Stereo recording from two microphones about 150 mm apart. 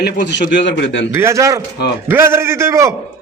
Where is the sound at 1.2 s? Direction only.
20° right (ahead or behind).